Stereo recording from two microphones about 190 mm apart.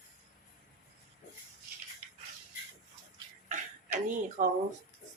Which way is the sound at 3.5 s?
40° right (ahead or behind).